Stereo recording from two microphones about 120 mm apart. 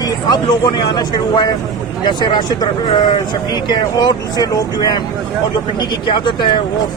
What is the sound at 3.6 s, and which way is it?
Speech, 35° left (ahead or behind).